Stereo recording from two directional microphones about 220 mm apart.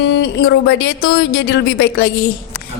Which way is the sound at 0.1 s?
50° left (ahead or behind).